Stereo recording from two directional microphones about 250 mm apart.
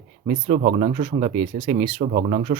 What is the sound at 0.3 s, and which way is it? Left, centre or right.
Speech, right.